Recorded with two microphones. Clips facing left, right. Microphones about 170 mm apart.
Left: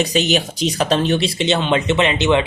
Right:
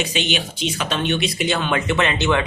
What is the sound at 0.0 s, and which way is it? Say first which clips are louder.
Speech: left 6 dB; 40° left (ahead or behind).